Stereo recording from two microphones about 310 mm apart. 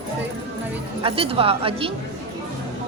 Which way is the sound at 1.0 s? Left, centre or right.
Centre.